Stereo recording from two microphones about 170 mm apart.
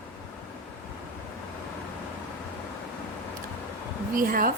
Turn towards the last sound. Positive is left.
turn(degrees=-55)  # may be behind; listen again after turning